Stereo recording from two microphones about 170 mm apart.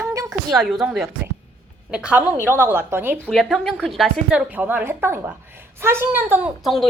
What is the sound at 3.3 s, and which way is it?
A woman's voice, centre (ahead or behind).